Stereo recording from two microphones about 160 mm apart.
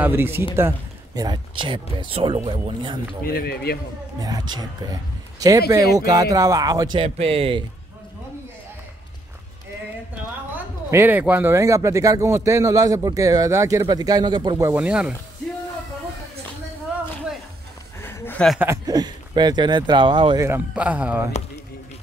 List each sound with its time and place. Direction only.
0.0 s a man's voice: 15° right (ahead or behind); by 3.0 s 30° right (ahead or behind)
3.3 s speech: 75° left (ahead or behind)
4.2 s speech: 25° right (ahead or behind)
7.0 s speech: 40° right (ahead or behind)
10.5 s speech: 15° right (ahead or behind)
14.6 s a man's voice: 10° right (ahead or behind)
18.0 s a sound: 15° left (ahead or behind)
18.6 s speech: 20° right (ahead or behind)
20.4 s a man's voice: 10° right (ahead or behind)